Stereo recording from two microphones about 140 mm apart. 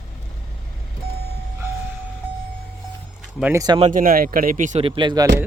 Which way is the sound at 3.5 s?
30° right (ahead or behind).